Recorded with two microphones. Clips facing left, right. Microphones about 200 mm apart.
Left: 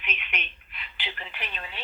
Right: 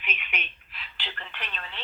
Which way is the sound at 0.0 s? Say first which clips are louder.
Even; 10° right (ahead or behind).